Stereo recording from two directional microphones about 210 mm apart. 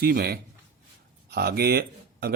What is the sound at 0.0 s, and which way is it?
Speech, 45° right (ahead or behind).